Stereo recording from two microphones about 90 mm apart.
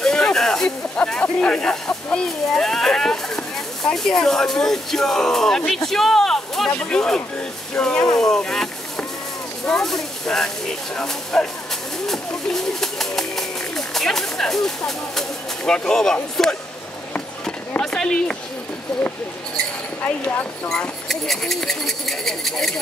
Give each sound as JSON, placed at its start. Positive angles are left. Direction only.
{"t": 0.0, "sound": "speech", "side_deg": 5}
{"t": 8.2, "sound": "boat", "side_deg": 5}
{"t": 9.7, "sound": "speech", "side_deg": 5}
{"t": 17.1, "sound": "a sound", "side_deg": 15}
{"t": 17.8, "sound": "speech", "side_deg": 10}
{"t": 20.0, "sound": "speech", "side_deg": 20}
{"t": 20.6, "sound": "speech", "side_deg": 10}